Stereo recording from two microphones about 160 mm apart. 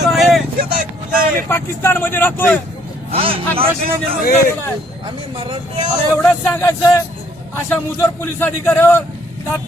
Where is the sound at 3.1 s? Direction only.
35° right (ahead or behind).